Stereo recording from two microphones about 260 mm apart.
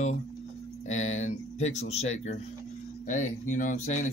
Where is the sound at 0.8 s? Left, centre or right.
Left.